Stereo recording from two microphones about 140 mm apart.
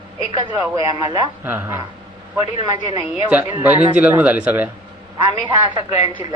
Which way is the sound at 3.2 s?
10° right (ahead or behind).